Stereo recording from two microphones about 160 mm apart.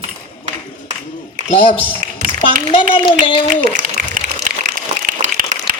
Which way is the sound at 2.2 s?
55° right (ahead or behind).